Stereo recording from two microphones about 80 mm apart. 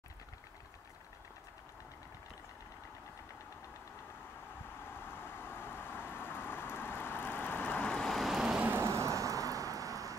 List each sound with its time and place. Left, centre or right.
4.8 s vehicle: left; by 8.6 s centre
8.8 s vehicle: right